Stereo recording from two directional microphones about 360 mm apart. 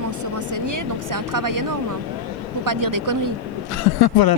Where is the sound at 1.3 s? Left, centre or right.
Right.